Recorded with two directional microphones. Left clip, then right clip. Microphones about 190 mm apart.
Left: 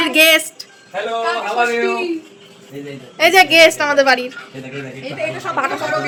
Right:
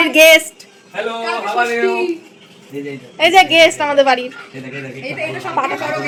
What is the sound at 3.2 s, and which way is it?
A woman's voice, 10° left (ahead or behind).